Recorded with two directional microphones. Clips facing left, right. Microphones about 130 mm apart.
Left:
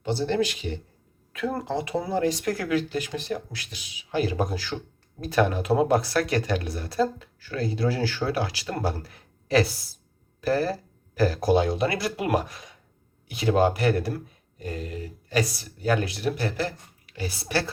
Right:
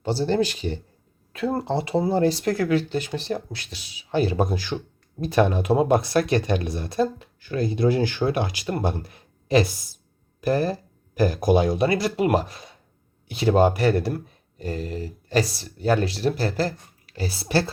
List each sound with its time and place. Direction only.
0.0 s speech: 35° right (ahead or behind)